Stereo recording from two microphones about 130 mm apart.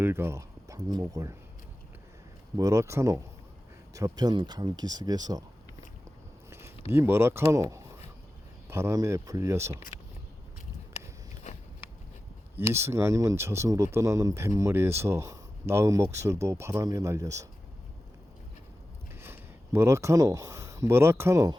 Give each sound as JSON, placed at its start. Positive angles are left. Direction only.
{"t": 0.0, "sound": "speech", "side_deg": -20}
{"t": 2.6, "sound": "speech", "side_deg": -25}
{"t": 6.5, "sound": "speech", "side_deg": -20}
{"t": 12.5, "sound": "speech", "side_deg": -20}
{"t": 19.2, "sound": "speech", "side_deg": -20}